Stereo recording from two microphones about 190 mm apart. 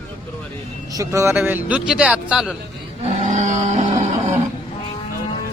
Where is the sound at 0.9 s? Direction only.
15° right (ahead or behind).